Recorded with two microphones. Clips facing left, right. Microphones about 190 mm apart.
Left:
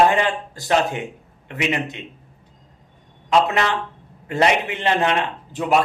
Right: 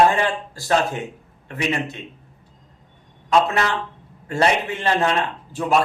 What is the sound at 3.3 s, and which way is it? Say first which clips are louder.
Speech: even; 20° left (ahead or behind).